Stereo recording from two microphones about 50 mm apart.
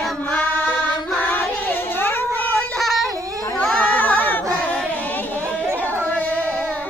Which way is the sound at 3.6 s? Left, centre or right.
Left.